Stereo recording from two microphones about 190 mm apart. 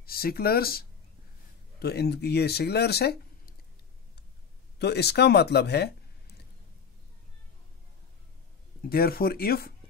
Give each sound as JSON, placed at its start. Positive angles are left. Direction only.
{"t": 0.0, "sound": "speech", "side_deg": 55}
{"t": 4.7, "sound": "speech", "side_deg": 60}
{"t": 8.8, "sound": "speech", "side_deg": 55}